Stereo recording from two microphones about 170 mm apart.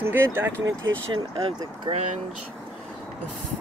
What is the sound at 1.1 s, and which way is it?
Speech, 30° right (ahead or behind).